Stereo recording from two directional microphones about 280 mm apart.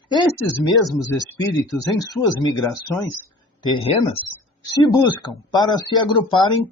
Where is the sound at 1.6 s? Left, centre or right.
Centre.